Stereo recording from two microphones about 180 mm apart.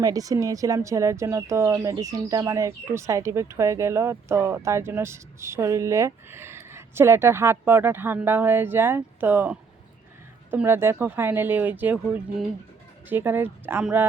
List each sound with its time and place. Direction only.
0.0 s speech: 20° right (ahead or behind)